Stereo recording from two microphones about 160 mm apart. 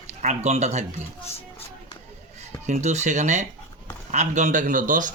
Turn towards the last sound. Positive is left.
turn(degrees=-55)  # may be behind; listen again after turning